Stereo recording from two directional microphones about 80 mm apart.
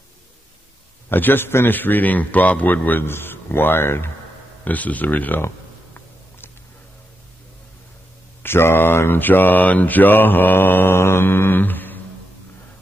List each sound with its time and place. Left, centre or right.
1.0 s speech: left
8.4 s speech: left